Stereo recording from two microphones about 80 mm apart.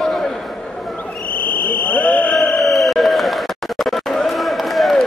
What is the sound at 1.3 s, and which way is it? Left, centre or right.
Radio, centre.